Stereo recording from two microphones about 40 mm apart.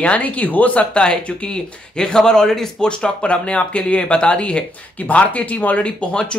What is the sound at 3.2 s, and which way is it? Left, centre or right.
Speech, left.